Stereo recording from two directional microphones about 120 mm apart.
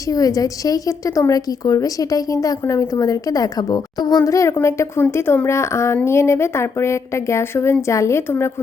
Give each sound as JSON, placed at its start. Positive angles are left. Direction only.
{"t": 0.1, "sound": "a woman's voice", "side_deg": 30}